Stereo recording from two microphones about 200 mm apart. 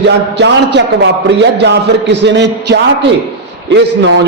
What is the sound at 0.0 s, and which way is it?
A man's voice, 60° right (ahead or behind).